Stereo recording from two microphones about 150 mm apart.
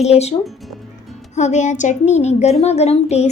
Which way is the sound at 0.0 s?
45° left (ahead or behind).